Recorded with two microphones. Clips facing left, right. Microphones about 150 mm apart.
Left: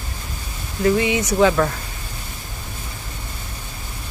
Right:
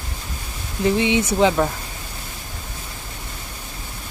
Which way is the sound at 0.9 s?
25° right (ahead or behind).